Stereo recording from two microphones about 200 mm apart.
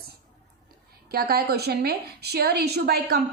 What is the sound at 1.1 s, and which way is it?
A woman's voice, 50° right (ahead or behind).